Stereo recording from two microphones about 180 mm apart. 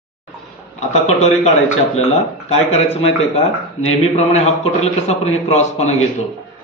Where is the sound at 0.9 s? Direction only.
40° left (ahead or behind).